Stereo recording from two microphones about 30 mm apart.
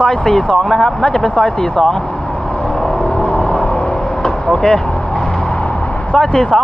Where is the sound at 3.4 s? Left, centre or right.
Left.